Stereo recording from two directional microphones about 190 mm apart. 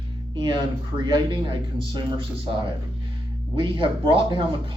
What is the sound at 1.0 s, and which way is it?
Speech, 25° right (ahead or behind).